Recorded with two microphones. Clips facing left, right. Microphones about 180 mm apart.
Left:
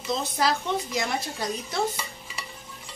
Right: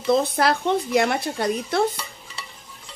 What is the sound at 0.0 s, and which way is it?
Speech, 60° right (ahead or behind).